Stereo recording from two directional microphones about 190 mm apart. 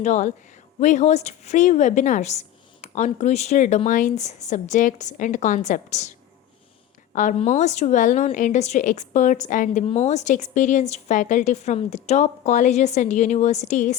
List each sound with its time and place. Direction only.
0.0 s speech: 40° left (ahead or behind)